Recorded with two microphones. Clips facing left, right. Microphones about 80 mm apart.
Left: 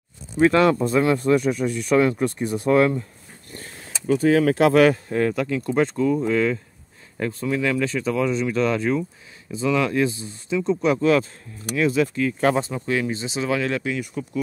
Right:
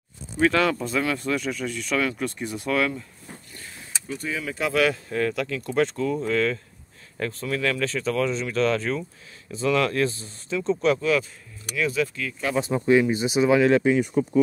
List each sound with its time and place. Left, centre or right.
0.4 s speech: left
4.1 s speech: left
4.7 s speech: left; by 11.0 s centre
11.0 s speech: left
12.6 s speech: right